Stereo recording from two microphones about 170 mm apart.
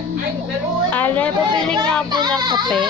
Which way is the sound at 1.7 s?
25° right (ahead or behind).